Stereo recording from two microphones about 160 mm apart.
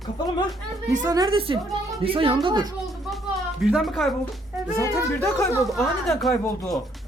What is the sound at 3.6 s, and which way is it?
Speech, centre (ahead or behind).